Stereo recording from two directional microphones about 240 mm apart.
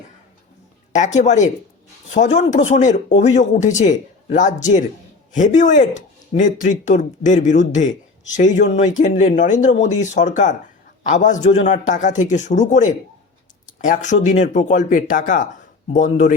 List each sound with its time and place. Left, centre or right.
0.9 s speech: left